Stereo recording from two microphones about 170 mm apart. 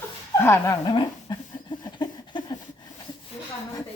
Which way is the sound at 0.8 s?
25° left (ahead or behind).